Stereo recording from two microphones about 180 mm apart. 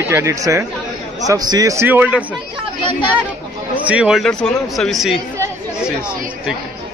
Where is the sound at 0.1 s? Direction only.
15° right (ahead or behind).